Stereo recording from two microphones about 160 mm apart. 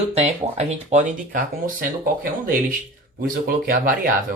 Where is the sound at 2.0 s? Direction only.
60° right (ahead or behind).